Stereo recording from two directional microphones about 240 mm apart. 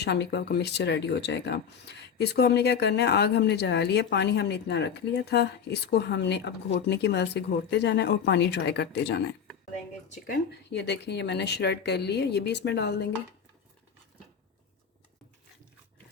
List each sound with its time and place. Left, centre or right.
0.0 s speech: left